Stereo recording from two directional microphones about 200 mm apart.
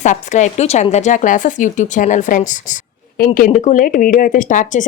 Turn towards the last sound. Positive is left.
turn(degrees=40)  # may be behind; listen again after turning